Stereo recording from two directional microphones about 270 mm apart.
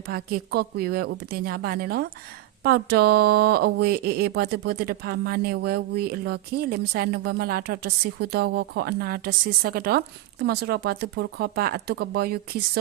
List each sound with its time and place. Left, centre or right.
0.1 s speech: right